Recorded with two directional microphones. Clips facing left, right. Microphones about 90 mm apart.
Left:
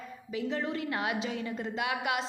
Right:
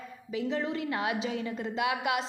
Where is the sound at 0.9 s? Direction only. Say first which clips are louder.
Right 1 dB; 25° right (ahead or behind).